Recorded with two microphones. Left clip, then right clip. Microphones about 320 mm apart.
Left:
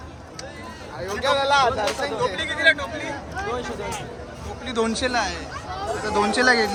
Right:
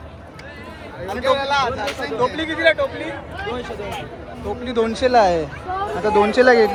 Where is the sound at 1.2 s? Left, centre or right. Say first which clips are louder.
Even; left.